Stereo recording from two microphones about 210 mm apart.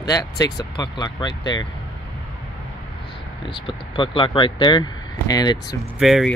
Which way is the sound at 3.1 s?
25° left (ahead or behind).